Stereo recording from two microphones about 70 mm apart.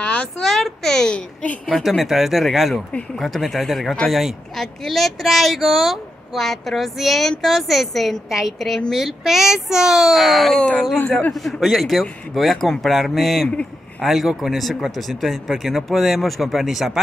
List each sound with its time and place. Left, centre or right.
0.0 s a sound: centre
0.4 s a child's voice: centre
1.7 s speech: centre